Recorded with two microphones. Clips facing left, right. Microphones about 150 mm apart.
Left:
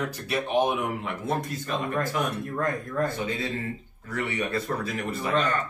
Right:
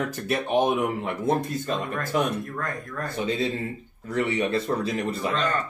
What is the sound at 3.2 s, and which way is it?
Speech, 25° right (ahead or behind).